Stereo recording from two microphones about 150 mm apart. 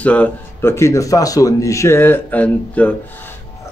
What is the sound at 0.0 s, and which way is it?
Speech, 10° left (ahead or behind).